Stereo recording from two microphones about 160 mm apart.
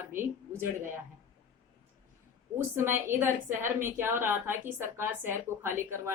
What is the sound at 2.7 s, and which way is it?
A woman's voice, 15° right (ahead or behind).